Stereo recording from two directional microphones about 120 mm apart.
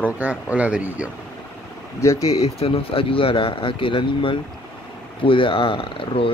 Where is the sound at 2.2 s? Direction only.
60° left (ahead or behind).